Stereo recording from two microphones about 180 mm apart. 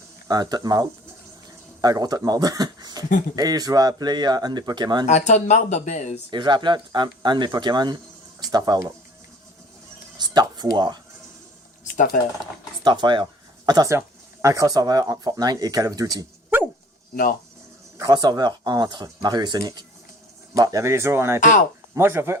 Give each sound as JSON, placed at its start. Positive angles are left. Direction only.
{"t": 0.3, "sound": "speech", "side_deg": -20}
{"t": 5.0, "sound": "speech", "side_deg": 40}
{"t": 6.3, "sound": "speech", "side_deg": -25}
{"t": 10.2, "sound": "a sound", "side_deg": -25}
{"t": 11.9, "sound": "speech", "side_deg": 50}
{"t": 12.8, "sound": "speech", "side_deg": -25}
{"t": 17.9, "sound": "speech", "side_deg": -20}